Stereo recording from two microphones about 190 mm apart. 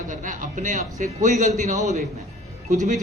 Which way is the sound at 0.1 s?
45° right (ahead or behind).